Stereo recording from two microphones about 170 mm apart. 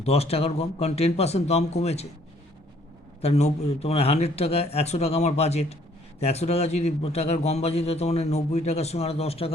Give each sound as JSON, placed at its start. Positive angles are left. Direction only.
{"t": 0.0, "sound": "a man's voice", "side_deg": 35}
{"t": 3.2, "sound": "a man's voice", "side_deg": 40}